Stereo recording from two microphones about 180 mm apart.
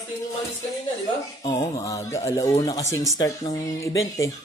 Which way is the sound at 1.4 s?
20° left (ahead or behind).